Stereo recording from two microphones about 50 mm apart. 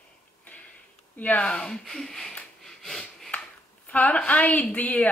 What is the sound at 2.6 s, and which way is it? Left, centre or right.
Sniff, centre.